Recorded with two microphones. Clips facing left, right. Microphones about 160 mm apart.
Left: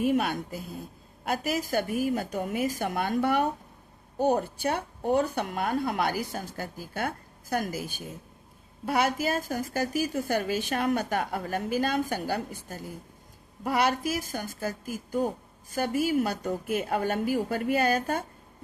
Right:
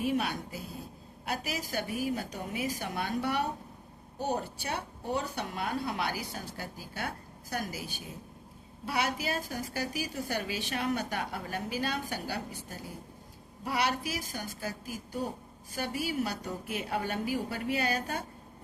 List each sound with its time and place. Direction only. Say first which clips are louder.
0.0 s a woman's voice: left 5 dB; 50° left (ahead or behind)